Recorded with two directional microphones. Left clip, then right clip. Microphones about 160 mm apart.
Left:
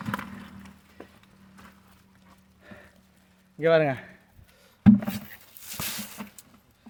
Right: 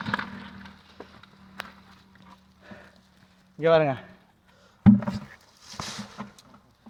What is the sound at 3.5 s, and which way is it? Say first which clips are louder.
Speech: right 1 dB; 5° left (ahead or behind).